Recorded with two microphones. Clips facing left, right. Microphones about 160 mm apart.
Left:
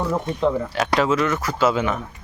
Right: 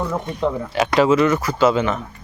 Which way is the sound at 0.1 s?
Centre (ahead or behind).